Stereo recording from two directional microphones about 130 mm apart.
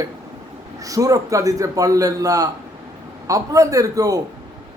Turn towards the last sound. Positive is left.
turn(degrees=-25)  # may be behind; listen again after turning